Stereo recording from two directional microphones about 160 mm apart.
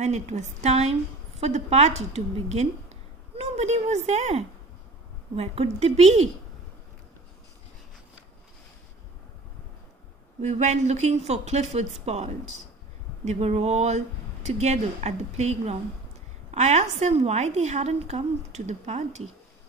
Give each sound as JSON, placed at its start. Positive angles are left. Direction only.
{"t": 0.0, "sound": "a woman's voice", "side_deg": -45}
{"t": 10.4, "sound": "a woman's voice", "side_deg": -45}